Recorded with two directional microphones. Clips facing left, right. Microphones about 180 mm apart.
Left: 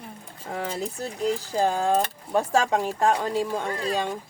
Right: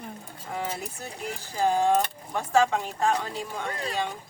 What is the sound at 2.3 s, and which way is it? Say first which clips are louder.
Speech: left 1 dB; 40° left (ahead or behind).